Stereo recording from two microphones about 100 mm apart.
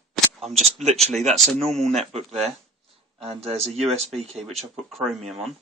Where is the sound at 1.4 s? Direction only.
5° left (ahead or behind).